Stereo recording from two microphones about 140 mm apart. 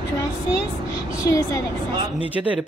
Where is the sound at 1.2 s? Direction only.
25° left (ahead or behind).